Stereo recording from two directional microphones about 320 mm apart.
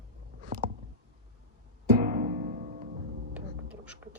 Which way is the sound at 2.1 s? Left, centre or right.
Right.